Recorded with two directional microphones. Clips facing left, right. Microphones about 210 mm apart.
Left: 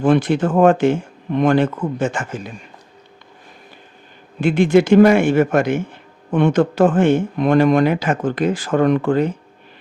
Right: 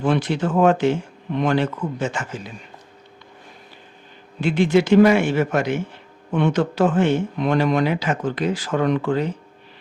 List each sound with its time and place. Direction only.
0.0 s speech: 50° left (ahead or behind)
4.4 s speech: 50° left (ahead or behind)